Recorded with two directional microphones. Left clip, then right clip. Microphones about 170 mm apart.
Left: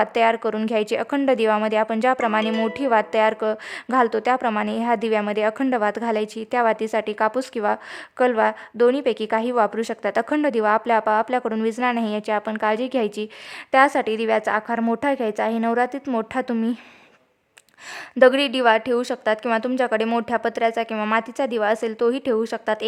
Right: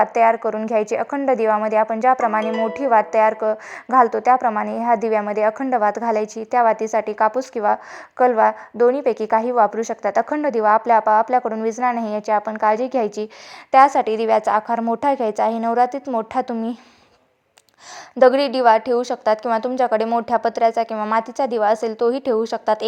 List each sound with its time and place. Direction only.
0.0 s speech: 30° left (ahead or behind)
18.2 s speech: 35° left (ahead or behind)